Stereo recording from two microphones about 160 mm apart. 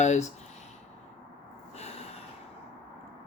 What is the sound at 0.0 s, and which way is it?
Speech, 45° left (ahead or behind).